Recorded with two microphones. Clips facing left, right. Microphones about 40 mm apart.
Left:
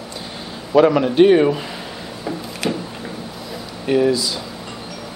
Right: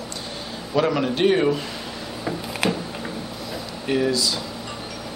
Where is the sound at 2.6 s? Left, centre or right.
Centre.